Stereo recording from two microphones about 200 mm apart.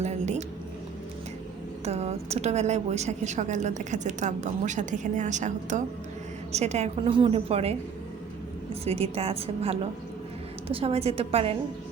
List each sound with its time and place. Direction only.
0.0 s a woman's voice: 35° right (ahead or behind)
1.8 s a woman's voice: 30° right (ahead or behind)